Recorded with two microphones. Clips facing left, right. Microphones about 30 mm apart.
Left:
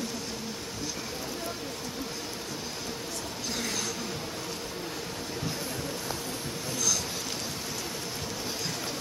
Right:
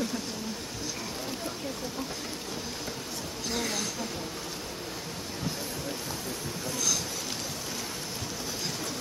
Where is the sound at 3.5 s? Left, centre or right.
Centre.